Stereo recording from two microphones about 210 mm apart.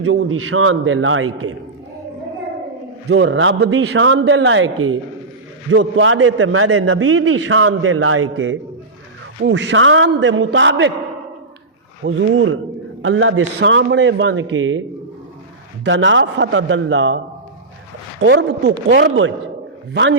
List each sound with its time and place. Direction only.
0.0 s a man's voice: 80° right
3.1 s a man's voice: 60° right (ahead or behind)
9.4 s a man's voice: 60° right (ahead or behind)
12.0 s a man's voice: 65° right (ahead or behind)
15.8 s a man's voice: 60° right (ahead or behind)
18.2 s a man's voice: 60° right (ahead or behind)